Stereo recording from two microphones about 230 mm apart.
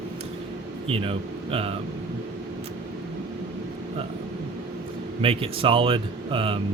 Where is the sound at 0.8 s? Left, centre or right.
Right.